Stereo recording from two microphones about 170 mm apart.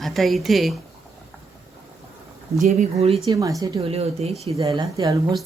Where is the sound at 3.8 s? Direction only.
35° right (ahead or behind).